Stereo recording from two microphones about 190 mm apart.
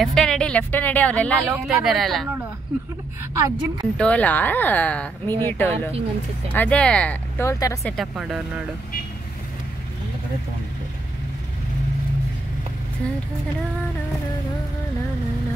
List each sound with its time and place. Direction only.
0.0 s speech: 5° left (ahead or behind)
3.3 s a woman's voice: 15° right (ahead or behind)
4.0 s speech: 5° left (ahead or behind)
7.8 s speech: centre (ahead or behind)